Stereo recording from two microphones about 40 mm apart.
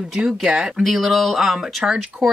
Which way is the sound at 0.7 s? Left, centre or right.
Centre.